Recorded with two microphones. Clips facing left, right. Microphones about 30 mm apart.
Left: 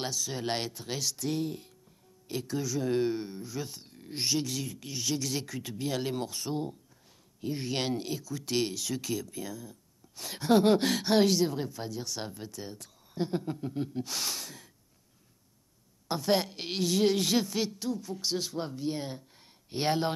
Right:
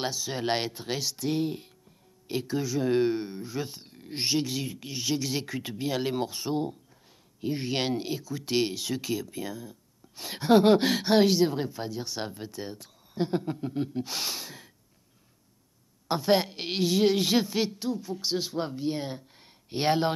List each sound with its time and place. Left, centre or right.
0.0 s speech: right
16.1 s speech: centre